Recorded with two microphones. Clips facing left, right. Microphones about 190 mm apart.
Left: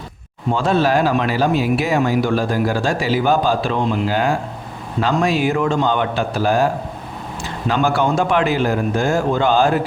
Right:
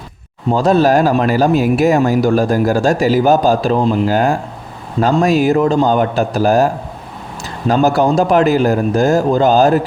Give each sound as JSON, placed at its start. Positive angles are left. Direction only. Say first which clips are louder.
{"t": 0.5, "sound": "a man's voice", "louder": "right 5 dB", "side_deg": -40}
{"t": 7.7, "sound": "a man's voice", "louder": "right 5 dB", "side_deg": -40}